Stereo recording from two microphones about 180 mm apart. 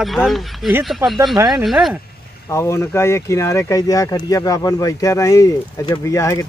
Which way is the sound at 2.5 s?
15° left (ahead or behind).